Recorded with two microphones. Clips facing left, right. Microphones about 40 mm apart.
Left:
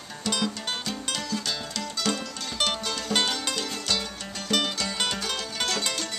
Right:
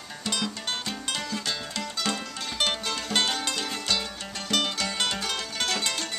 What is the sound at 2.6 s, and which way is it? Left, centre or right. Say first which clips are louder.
Music: even; centre.